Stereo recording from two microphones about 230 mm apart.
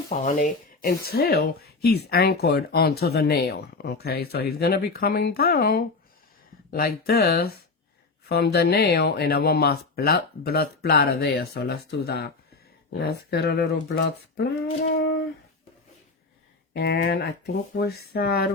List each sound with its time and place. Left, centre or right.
0.3 s speech: left
14.9 s a sound: left
16.7 s speech: left